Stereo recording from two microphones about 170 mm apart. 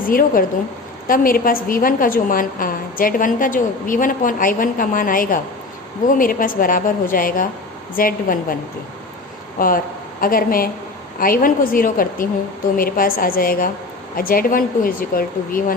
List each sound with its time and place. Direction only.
0.0 s a woman's voice: 55° left (ahead or behind)
9.6 s a woman's voice: 55° left (ahead or behind)